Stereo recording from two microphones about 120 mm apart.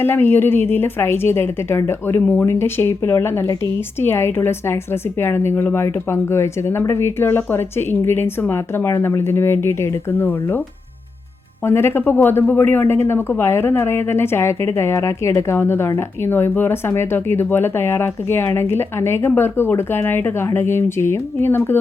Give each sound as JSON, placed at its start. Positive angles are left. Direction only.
{"t": 0.0, "sound": "a woman's voice", "side_deg": 15}
{"t": 11.6, "sound": "a woman's voice", "side_deg": 20}